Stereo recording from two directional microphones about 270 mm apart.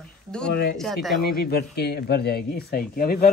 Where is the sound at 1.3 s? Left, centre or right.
Left.